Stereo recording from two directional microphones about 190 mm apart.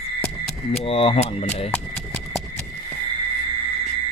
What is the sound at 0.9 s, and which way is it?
Speech, 30° left (ahead or behind).